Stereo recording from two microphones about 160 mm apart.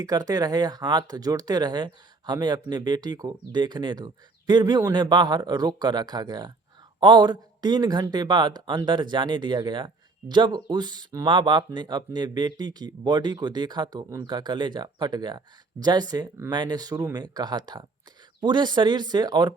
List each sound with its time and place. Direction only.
0.0 s speech: 25° right (ahead or behind)